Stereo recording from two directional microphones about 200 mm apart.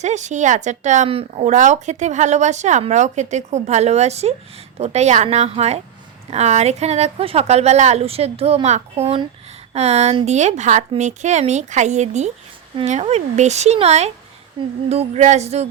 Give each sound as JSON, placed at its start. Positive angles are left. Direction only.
{"t": 0.0, "sound": "speech", "side_deg": -35}